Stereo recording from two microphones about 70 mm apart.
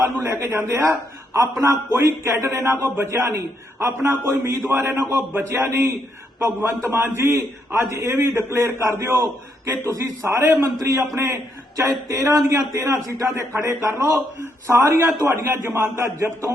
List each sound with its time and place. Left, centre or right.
0.2 s a man's voice: right
1.9 s a man's voice: right
2.8 s a man's voice: right